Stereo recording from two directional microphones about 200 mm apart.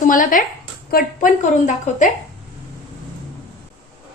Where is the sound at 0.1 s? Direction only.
40° left (ahead or behind).